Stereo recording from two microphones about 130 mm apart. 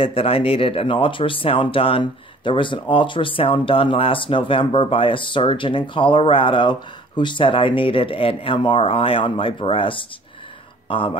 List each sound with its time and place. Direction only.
0.0 s speech: 45° left (ahead or behind)